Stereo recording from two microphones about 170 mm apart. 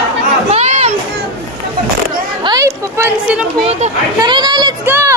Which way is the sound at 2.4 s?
20° right (ahead or behind).